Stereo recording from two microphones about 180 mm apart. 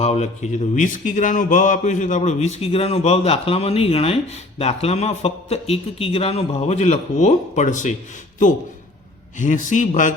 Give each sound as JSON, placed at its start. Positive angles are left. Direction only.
{"t": 0.0, "sound": "speech", "side_deg": 40}
{"t": 9.4, "sound": "a man's voice", "side_deg": 45}